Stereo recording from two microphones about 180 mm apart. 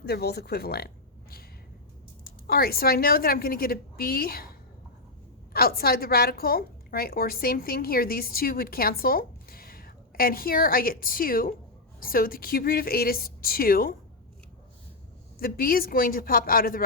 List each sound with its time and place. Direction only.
0.1 s a woman's voice: 60° left (ahead or behind)
2.5 s a woman's voice: 55° left (ahead or behind)
5.5 s a woman's voice: 60° left (ahead or behind)
15.4 s speech: 55° left (ahead or behind)